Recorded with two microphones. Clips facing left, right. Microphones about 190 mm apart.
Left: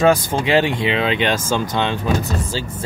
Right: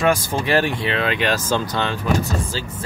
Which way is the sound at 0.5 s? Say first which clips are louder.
Left 3 dB; 20° left (ahead or behind).